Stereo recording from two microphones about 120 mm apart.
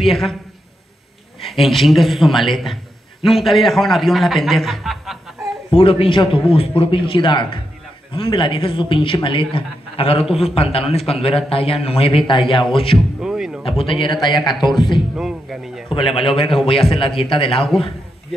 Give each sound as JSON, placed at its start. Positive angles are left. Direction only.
{"t": 0.0, "sound": "a man's voice", "side_deg": 0}
{"t": 1.4, "sound": "a man's voice", "side_deg": 0}
{"t": 5.7, "sound": "a man's voice", "side_deg": 50}
{"t": 13.2, "sound": "a sound", "side_deg": -5}
{"t": 13.7, "sound": "a man's voice", "side_deg": 50}
{"t": 15.1, "sound": "a man's voice", "side_deg": -5}
{"t": 15.9, "sound": "a man's voice", "side_deg": 50}